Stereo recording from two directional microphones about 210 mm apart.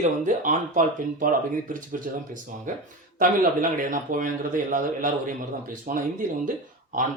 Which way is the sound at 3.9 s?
40° right (ahead or behind).